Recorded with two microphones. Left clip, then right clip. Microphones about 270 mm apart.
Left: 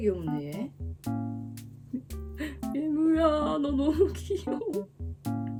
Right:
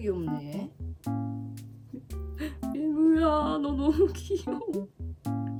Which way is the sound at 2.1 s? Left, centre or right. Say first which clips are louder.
Even; centre.